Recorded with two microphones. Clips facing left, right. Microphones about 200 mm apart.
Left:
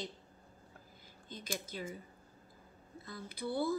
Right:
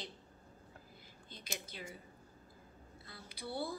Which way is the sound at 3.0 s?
45° left (ahead or behind).